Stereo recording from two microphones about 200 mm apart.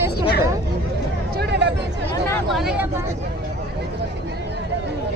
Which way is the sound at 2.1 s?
10° left (ahead or behind).